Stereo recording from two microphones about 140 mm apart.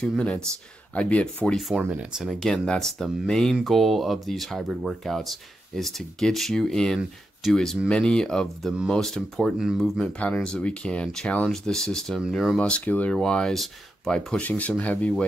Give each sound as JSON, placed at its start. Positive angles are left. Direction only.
{"t": 0.0, "sound": "speech", "side_deg": 5}
{"t": 1.8, "sound": "speech", "side_deg": -10}